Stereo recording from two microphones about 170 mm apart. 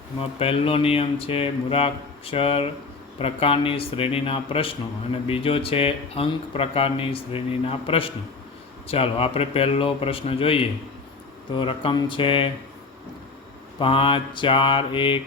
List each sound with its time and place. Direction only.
0.2 s speech: 35° left (ahead or behind)
13.7 s speech: 30° left (ahead or behind)